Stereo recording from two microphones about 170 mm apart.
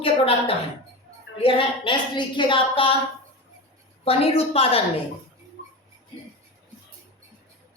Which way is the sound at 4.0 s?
35° left (ahead or behind).